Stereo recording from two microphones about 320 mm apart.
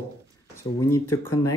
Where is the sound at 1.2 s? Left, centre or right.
Centre.